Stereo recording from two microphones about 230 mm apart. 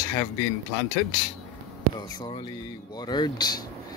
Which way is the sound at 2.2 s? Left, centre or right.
Centre.